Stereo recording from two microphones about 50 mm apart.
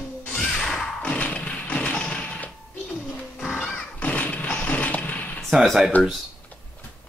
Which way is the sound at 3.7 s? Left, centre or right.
Left.